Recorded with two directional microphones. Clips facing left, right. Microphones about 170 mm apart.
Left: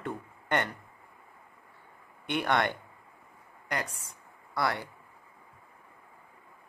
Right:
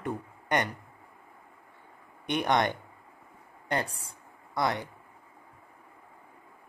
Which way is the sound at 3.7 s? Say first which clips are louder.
Right 4 dB; 35° right (ahead or behind).